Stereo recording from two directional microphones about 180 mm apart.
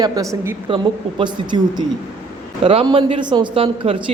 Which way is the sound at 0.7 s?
30° right (ahead or behind).